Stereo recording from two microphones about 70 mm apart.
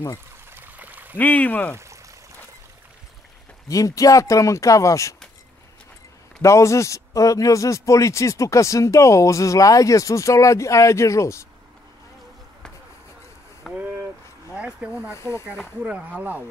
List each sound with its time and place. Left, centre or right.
0.5 s a sound: right
1.1 s speech: left
3.6 s speech: left
6.4 s speech: left
13.7 s vehicle: right
14.5 s speech: centre
15.0 s speech: left
15.8 s speech: right